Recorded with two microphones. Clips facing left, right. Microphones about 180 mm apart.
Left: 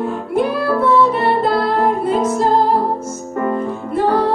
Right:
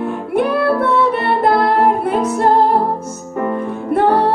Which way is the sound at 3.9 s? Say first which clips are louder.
Right 2 dB; 60° right (ahead or behind).